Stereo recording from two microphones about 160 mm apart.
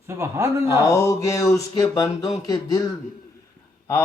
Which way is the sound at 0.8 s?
20° left (ahead or behind).